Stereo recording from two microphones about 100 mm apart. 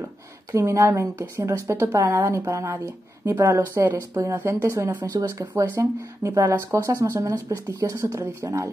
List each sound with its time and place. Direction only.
0.5 s speech: 30° right (ahead or behind)